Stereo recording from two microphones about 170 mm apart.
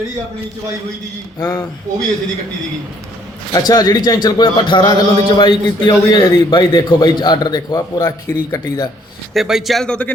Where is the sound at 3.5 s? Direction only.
20° left (ahead or behind).